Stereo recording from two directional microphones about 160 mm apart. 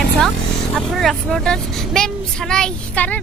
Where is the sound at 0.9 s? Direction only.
Centre (ahead or behind).